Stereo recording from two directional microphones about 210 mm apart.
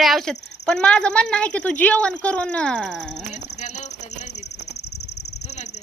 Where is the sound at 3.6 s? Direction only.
35° left (ahead or behind).